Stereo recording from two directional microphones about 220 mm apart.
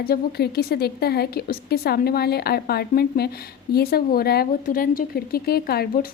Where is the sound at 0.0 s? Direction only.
45° left (ahead or behind).